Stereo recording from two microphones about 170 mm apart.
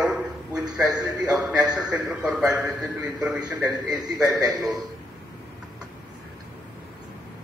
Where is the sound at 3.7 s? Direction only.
25° right (ahead or behind).